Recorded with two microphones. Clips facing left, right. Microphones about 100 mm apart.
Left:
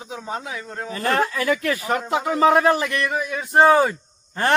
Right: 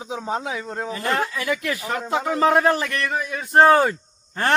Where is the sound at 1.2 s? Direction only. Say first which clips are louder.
Left 3 dB; 35° left (ahead or behind).